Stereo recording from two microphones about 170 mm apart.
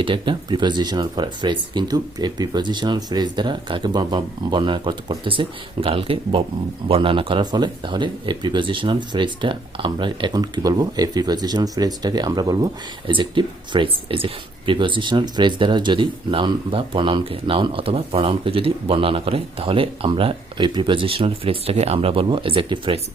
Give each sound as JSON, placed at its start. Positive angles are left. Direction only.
{"t": 0.0, "sound": "speech", "side_deg": -30}